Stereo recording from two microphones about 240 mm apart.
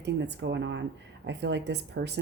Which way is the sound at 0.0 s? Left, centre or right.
Right.